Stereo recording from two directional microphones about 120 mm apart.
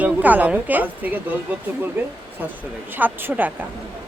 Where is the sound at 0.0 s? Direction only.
15° right (ahead or behind).